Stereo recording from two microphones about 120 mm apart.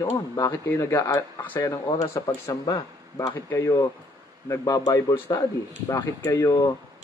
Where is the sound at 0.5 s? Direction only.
15° left (ahead or behind).